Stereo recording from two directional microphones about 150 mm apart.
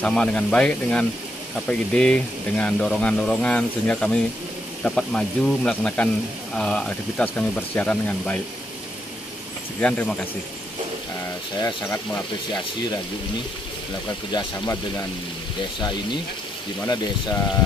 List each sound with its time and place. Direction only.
0.0 s speech: 5° left (ahead or behind)
9.8 s speech: 10° left (ahead or behind)
11.6 s speech: 15° left (ahead or behind)
14.3 s speech: 20° left (ahead or behind)